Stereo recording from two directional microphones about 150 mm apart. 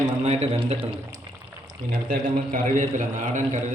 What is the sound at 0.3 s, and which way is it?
Speech, 40° right (ahead or behind).